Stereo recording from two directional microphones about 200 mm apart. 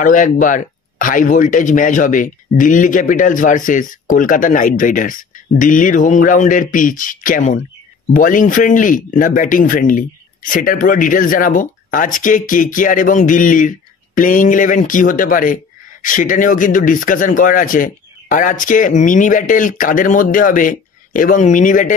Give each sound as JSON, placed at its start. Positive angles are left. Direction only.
{"t": 0.0, "sound": "speech", "side_deg": 40}